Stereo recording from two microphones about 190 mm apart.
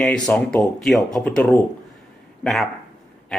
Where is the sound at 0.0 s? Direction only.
5° left (ahead or behind).